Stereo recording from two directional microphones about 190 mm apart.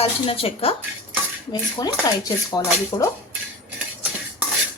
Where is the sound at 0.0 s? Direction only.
30° left (ahead or behind).